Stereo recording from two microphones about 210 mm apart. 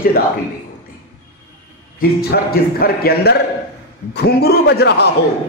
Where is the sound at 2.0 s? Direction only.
45° left (ahead or behind).